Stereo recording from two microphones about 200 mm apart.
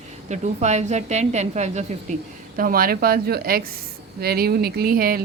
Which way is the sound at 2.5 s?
45° right (ahead or behind).